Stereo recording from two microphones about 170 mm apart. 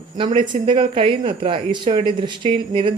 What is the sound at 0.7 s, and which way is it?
Speech, 30° right (ahead or behind).